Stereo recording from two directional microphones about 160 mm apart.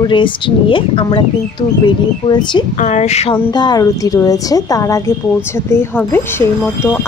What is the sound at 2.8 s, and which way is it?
Speech, 45° left (ahead or behind).